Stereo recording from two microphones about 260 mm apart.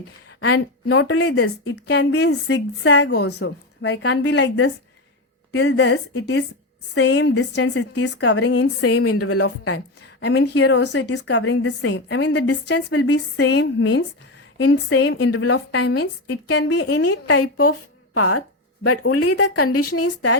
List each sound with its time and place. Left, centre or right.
0.4 s a woman's voice: left
1.7 s a woman's voice: left
10.2 s a woman's voice: left
16.7 s a woman's voice: left
17.1 s a woman's voice: left